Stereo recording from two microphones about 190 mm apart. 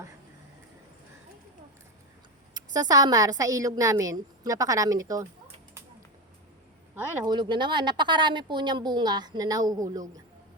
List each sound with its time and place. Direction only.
2.5 s a woman's voice: 20° right (ahead or behind)
6.9 s a woman's voice: 10° right (ahead or behind)
7.3 s a woman's voice: 25° right (ahead or behind)